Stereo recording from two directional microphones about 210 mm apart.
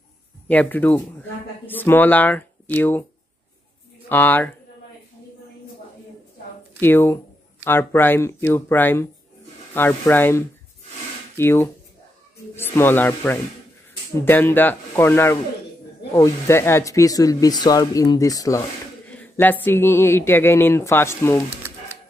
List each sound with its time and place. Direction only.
0.5 s speech: 10° left (ahead or behind)
4.1 s speech: 10° left (ahead or behind)
6.8 s speech: 10° left (ahead or behind)